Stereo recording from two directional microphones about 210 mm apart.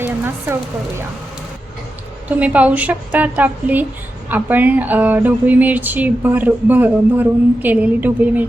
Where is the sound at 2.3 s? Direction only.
5° right (ahead or behind).